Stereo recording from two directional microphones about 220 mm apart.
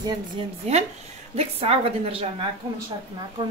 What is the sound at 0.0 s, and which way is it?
Dishes, 25° right (ahead or behind).